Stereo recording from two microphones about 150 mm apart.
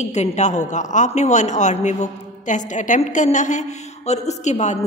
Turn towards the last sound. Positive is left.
turn(degrees=50)  # may be behind; listen again after turning